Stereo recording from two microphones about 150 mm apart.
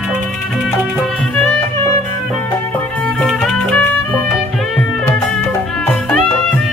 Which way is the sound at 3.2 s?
5° left (ahead or behind).